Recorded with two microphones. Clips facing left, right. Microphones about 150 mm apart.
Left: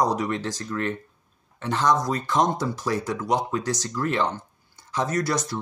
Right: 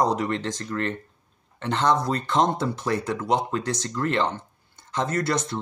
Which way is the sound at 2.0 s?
25° right (ahead or behind).